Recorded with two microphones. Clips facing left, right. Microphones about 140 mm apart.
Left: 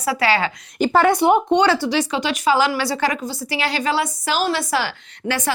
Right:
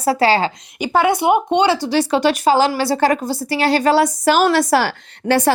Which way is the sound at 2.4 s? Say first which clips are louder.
Right 3 dB; 35° right (ahead or behind).